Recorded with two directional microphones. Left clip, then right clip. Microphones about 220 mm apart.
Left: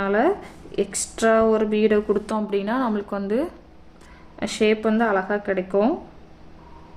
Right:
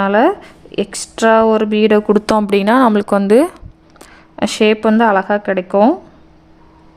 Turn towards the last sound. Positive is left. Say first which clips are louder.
# right 9 dB
turn(degrees=-45)  # may be behind; listen again after turning